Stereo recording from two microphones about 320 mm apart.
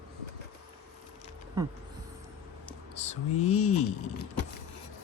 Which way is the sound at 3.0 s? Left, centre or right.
Centre.